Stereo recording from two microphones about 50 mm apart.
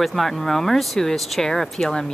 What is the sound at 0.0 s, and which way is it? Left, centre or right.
Speech, centre.